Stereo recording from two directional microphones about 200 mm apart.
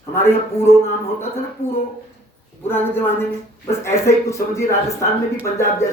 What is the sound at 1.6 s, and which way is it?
Speech, 30° left (ahead or behind).